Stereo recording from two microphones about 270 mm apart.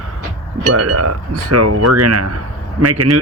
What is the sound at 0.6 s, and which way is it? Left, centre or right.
Speech, right.